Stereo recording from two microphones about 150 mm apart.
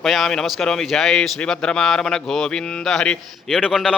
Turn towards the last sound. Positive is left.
turn(degrees=-5)  # may be behind; listen again after turning